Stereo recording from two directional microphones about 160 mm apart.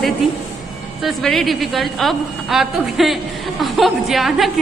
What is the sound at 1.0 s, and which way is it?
A woman's voice, centre (ahead or behind).